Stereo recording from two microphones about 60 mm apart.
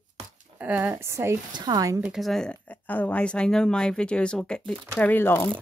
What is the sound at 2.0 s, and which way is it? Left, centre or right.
Speech, centre.